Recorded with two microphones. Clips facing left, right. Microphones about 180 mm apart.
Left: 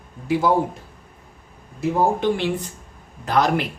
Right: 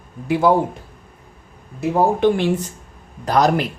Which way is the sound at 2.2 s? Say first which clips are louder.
Right 5 dB; 50° right (ahead or behind).